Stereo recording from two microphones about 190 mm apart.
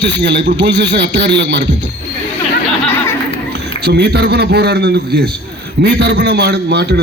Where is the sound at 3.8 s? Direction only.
60° right (ahead or behind).